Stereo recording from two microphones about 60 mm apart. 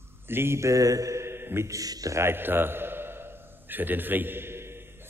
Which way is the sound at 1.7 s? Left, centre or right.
Right.